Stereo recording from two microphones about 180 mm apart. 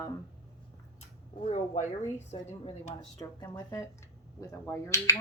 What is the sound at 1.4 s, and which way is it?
Speech, 30° left (ahead or behind).